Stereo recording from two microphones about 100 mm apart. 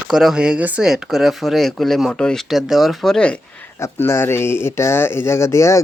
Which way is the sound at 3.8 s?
25° left (ahead or behind).